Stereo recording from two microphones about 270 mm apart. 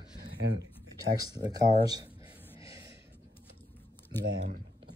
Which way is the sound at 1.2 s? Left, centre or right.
Centre.